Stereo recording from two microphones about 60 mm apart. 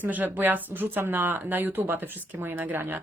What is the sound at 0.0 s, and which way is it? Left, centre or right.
Speech, right.